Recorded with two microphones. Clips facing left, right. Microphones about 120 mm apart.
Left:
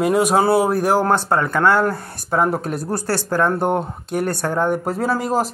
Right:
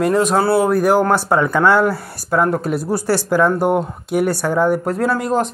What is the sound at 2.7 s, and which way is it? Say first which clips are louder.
Speech: right 4 dB; 10° right (ahead or behind).